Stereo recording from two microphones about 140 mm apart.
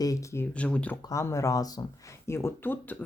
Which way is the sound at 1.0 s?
20° left (ahead or behind).